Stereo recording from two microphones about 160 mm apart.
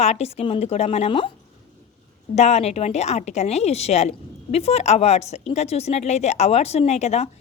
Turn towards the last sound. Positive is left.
turn(degrees=45)  # may be behind; listen again after turning